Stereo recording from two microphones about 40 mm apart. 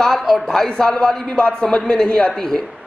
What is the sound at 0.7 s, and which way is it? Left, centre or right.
A man's voice, left.